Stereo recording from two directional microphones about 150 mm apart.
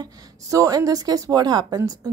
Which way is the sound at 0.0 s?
25° right (ahead or behind).